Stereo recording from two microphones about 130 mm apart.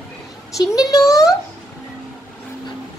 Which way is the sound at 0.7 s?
25° left (ahead or behind).